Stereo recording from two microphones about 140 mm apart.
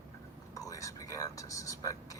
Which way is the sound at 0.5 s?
25° left (ahead or behind).